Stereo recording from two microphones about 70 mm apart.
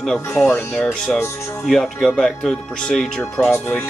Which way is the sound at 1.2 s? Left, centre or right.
Left.